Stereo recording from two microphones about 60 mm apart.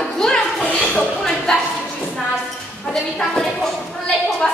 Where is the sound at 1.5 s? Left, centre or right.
Centre.